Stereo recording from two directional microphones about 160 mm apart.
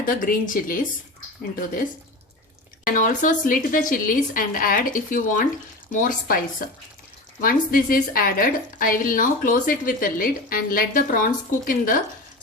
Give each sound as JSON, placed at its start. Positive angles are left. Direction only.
{"t": 0.0, "sound": "a woman's voice", "side_deg": 60}
{"t": 2.8, "sound": "a woman's voice", "side_deg": 55}
{"t": 7.4, "sound": "a woman's voice", "side_deg": 60}